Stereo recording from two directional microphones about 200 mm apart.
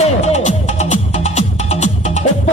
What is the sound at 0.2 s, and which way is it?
Music, 35° left (ahead or behind).